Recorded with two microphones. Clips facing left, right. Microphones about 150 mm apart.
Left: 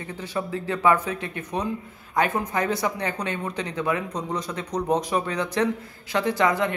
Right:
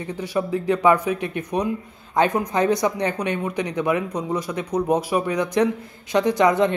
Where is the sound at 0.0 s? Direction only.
15° right (ahead or behind).